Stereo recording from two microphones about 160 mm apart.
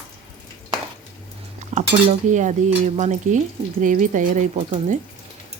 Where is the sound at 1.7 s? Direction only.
50° right (ahead or behind).